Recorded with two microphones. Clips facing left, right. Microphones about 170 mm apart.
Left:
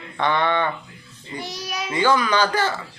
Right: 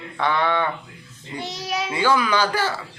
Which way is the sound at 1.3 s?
25° right (ahead or behind).